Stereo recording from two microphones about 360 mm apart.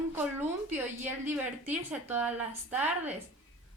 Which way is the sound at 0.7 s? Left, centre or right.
Centre.